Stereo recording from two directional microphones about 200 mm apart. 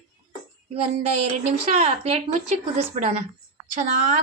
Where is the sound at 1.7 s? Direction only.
30° right (ahead or behind).